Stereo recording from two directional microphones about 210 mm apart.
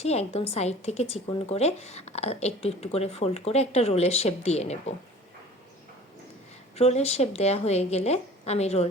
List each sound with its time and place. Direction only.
0.0 s a woman's voice: 30° left (ahead or behind)
6.7 s a woman's voice: 30° left (ahead or behind)